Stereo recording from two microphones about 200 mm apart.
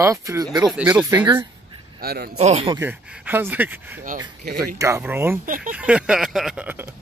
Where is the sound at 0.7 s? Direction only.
5° right (ahead or behind).